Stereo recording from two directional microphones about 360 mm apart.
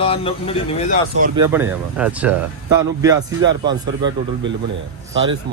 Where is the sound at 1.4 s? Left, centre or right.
Centre.